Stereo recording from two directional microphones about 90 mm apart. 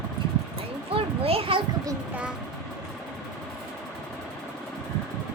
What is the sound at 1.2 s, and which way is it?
Speech, 90° right.